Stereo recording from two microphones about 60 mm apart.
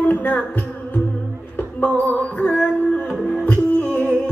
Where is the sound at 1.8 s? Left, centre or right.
Left.